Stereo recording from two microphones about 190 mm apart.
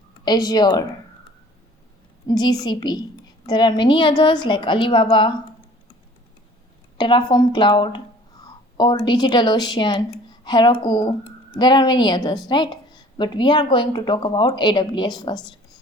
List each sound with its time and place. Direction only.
0.3 s speech: 20° left (ahead or behind)
2.2 s speech: 20° left (ahead or behind)
7.0 s speech: 25° left (ahead or behind)